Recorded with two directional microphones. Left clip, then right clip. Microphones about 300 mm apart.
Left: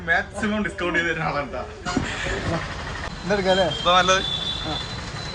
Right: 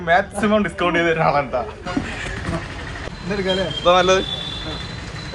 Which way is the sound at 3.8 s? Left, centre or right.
Centre.